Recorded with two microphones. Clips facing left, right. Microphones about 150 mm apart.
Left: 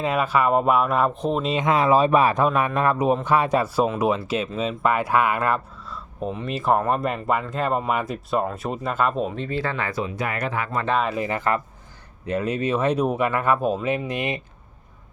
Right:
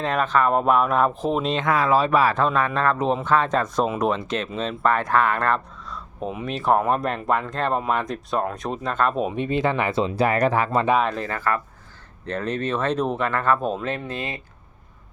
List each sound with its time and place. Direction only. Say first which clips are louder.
0.0 s speech: even; 5° left (ahead or behind)
1.6 s speech: left 3 dB; 20° left (ahead or behind)
9.1 s speech: right 2 dB; 10° right (ahead or behind); by 10.8 s 35° right (ahead or behind)
11.0 s speech: left 1 dB; 10° left (ahead or behind)
12.2 s speech: left 2 dB; 10° left (ahead or behind)